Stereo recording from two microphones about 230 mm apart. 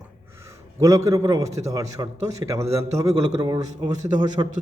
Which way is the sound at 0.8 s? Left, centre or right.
Centre.